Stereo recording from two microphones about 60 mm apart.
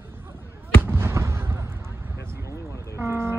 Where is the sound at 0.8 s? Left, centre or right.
Right.